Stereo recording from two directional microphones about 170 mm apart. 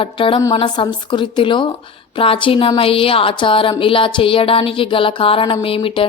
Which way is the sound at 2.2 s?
30° left (ahead or behind).